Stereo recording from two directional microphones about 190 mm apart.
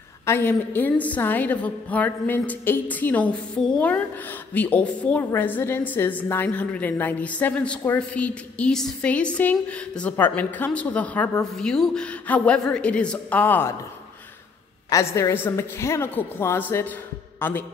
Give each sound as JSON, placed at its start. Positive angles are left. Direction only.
{"t": 0.2, "sound": "a woman's voice", "side_deg": 10}
{"t": 14.9, "sound": "a woman's voice", "side_deg": 15}